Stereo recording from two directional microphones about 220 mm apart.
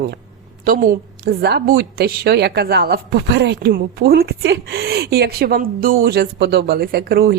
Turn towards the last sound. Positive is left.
turn(degrees=-45)  # may be behind; listen again after turning